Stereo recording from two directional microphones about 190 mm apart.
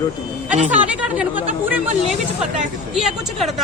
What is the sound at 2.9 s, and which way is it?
Speech, centre (ahead or behind).